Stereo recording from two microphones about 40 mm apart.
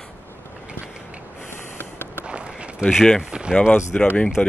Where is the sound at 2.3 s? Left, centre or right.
Right.